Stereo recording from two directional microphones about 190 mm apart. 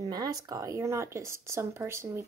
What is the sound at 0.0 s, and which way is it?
Speech, 20° right (ahead or behind).